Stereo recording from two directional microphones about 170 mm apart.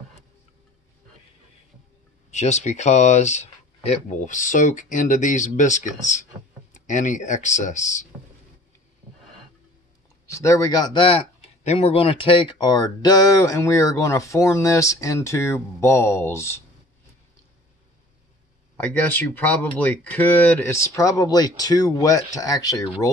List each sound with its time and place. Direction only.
2.3 s speech: 40° left (ahead or behind)
10.4 s speech: 20° left (ahead or behind)
18.9 s speech: 10° left (ahead or behind)